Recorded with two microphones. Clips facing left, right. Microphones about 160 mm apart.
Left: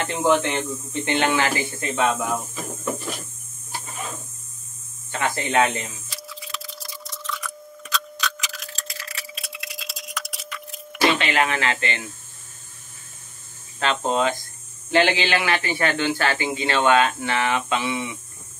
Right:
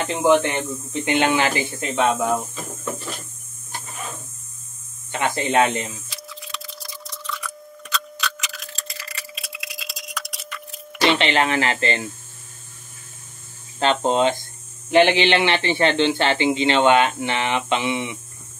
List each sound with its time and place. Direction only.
0.0 s speech: 15° right (ahead or behind)
5.1 s a man's voice: 20° right (ahead or behind)
6.0 s clock: centre (ahead or behind)
11.1 s speech: 25° right (ahead or behind)
13.7 s a man's voice: 30° right (ahead or behind)